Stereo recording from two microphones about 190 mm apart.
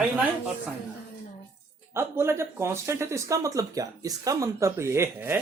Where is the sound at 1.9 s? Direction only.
15° right (ahead or behind).